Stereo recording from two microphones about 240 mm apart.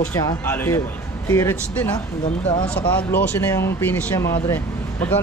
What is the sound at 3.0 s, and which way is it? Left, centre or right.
Speech, centre.